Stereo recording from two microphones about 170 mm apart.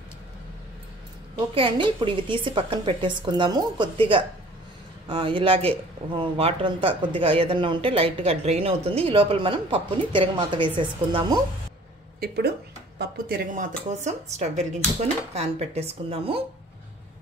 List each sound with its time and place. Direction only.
1.5 s a woman's voice: 30° right (ahead or behind)
12.2 s speech: 70° right (ahead or behind); by 13.7 s 55° right (ahead or behind)
13.8 s speech: 40° right (ahead or behind)